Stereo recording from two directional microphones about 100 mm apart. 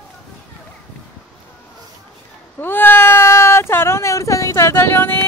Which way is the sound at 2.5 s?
20° left (ahead or behind).